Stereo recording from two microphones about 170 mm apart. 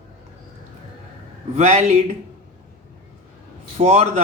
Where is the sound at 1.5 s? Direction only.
45° right (ahead or behind).